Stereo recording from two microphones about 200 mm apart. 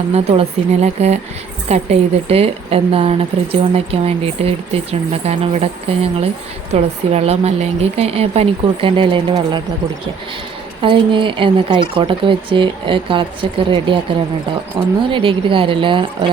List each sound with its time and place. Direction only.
0.1 s a woman's voice: 30° right (ahead or behind)
10.8 s a woman's voice: 25° right (ahead or behind)